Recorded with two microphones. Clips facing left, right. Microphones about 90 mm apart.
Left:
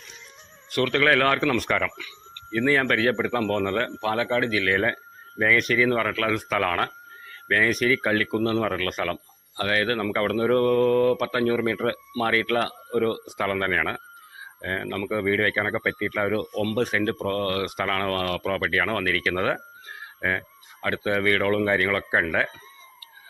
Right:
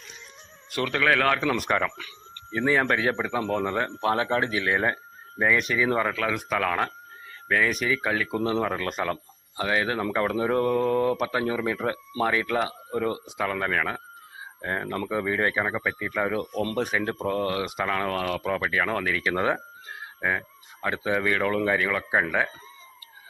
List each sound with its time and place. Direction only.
0.7 s a man's voice: 15° right (ahead or behind)
1.0 s speech: centre (ahead or behind)
1.5 s speech: 20° right (ahead or behind)
4.0 s speech: 25° right (ahead or behind); by 8.4 s 10° right (ahead or behind)
8.4 s speech: 25° right (ahead or behind)
13.4 s speech: 5° right (ahead or behind)
14.6 s speech: 20° right (ahead or behind)
15.6 s speech: 10° right (ahead or behind)
20.8 s speech: 15° right (ahead or behind)